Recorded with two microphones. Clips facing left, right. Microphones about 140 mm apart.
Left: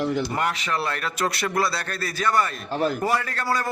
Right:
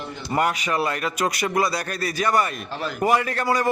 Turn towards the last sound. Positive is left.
turn(degrees=-20)  # may be behind; listen again after turning